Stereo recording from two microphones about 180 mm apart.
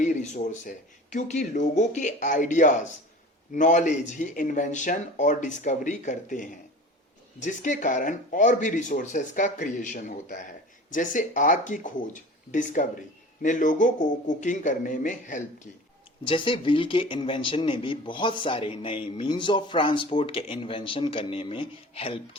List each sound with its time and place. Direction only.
0.0 s speech: 45° left (ahead or behind)
16.2 s a man's voice: 30° left (ahead or behind)